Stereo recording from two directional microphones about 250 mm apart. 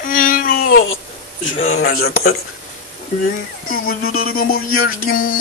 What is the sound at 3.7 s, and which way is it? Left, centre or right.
Speech, left.